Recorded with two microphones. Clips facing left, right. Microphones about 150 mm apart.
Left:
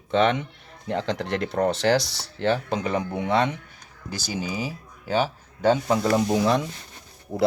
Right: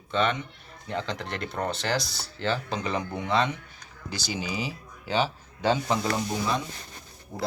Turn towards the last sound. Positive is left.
turn(degrees=90)